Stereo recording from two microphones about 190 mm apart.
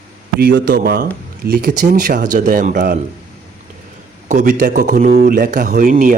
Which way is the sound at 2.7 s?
55° right (ahead or behind).